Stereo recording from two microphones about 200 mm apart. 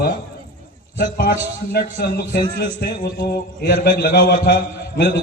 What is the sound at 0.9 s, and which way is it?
A man's voice, 55° left (ahead or behind).